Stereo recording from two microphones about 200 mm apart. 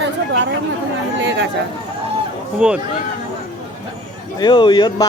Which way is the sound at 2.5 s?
5° right (ahead or behind).